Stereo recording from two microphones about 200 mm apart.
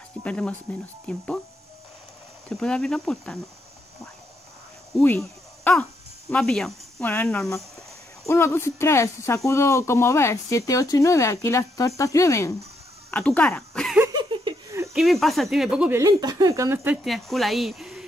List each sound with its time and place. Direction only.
0.2 s speech: 5° left (ahead or behind)
2.5 s speech: 5° left (ahead or behind)
4.9 s speech: 10° left (ahead or behind)
13.1 s a sound: 5° left (ahead or behind)
14.1 s laughter: 20° right (ahead or behind)
15.0 s speech: centre (ahead or behind)
16.0 s speech: 20° right (ahead or behind); by 18.0 s 5° right (ahead or behind)